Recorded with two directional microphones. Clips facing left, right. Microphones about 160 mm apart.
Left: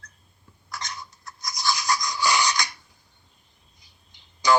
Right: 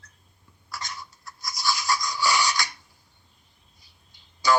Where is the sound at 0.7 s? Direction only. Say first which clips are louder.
Left 1 dB; 20° left (ahead or behind).